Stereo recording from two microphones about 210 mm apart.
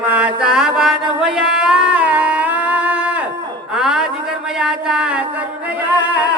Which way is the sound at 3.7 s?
Centre (ahead or behind).